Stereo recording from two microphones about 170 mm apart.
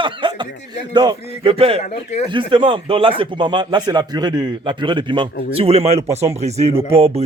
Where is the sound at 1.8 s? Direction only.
40° left (ahead or behind).